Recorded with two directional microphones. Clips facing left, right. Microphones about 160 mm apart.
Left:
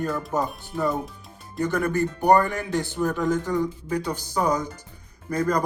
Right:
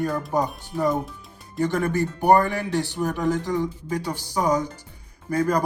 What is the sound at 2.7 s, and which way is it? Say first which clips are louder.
Speech: left 3 dB; 15° right (ahead or behind).